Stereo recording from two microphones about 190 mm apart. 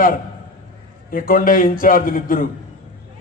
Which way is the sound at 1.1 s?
45° left (ahead or behind).